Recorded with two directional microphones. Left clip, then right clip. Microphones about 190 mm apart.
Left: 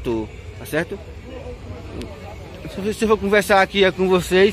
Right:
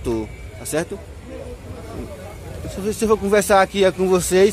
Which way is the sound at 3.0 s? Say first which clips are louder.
Even; 10° right (ahead or behind).